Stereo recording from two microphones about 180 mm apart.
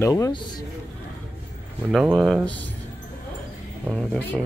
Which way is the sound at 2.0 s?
Centre (ahead or behind).